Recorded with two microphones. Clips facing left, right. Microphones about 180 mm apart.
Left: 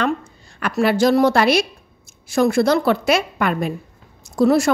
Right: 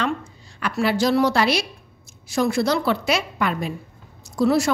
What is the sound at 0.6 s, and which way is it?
A woman's voice, 50° left (ahead or behind).